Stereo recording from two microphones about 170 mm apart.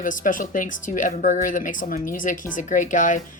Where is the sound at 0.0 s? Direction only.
50° left (ahead or behind).